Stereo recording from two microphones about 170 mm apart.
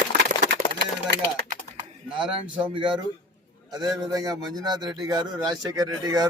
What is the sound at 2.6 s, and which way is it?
A man's voice, 30° right (ahead or behind).